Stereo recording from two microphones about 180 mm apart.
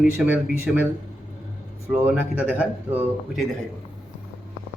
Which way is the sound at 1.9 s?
10° right (ahead or behind).